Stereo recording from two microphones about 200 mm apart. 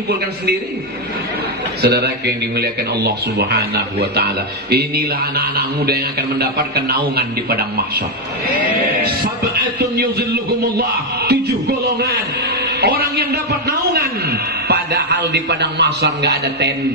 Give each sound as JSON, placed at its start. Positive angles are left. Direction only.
{"t": 1.8, "sound": "a man's voice", "side_deg": -50}
{"t": 9.9, "sound": "a man's voice", "side_deg": -55}